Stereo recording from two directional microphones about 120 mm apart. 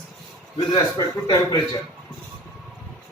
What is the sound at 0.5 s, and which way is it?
A man's voice, 30° left (ahead or behind).